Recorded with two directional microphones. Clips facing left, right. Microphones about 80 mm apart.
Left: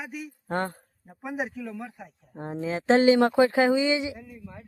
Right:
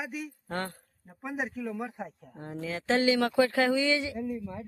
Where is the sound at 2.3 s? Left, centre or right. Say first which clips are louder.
Left 8 dB; left.